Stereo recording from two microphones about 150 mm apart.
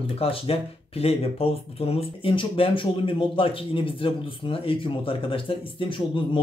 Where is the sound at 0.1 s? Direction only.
40° left (ahead or behind).